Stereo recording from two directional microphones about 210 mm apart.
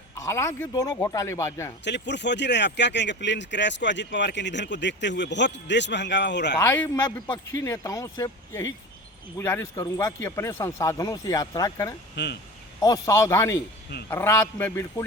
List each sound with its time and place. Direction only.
0.2 s speech: 15° left (ahead or behind)
1.8 s speech: 55° left (ahead or behind)
6.6 s speech: 10° left (ahead or behind)
12.1 s speech: 55° left (ahead or behind)
12.8 s speech: 15° left (ahead or behind)